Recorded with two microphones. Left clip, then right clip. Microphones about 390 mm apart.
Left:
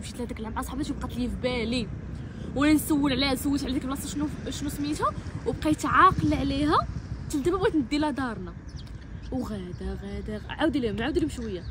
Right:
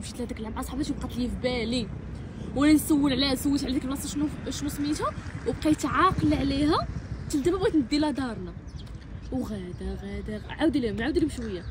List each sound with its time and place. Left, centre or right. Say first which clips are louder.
0.2 s speech: left 1 dB; centre
9.8 s a sound: even; centre
10.6 s speech: even; centre